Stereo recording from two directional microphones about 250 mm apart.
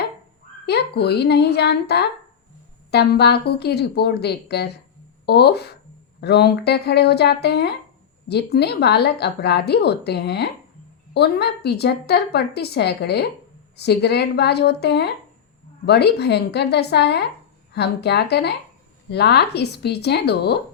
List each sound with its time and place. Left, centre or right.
0.6 s a woman's voice: left